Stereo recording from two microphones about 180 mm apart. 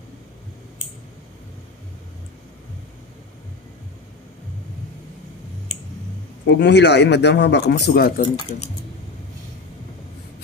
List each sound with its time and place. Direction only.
6.4 s speech: 75° left (ahead or behind); by 8.3 s 55° left (ahead or behind)